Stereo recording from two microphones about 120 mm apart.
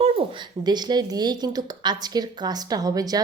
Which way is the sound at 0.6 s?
35° right (ahead or behind).